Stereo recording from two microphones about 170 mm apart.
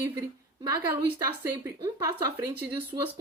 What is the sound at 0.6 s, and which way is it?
A woman's voice, 20° right (ahead or behind).